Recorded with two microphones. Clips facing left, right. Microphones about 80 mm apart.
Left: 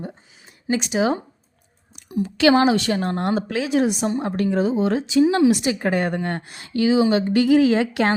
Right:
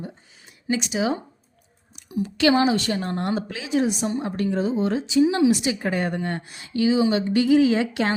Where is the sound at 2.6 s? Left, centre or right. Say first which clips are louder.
Left 3 dB; left.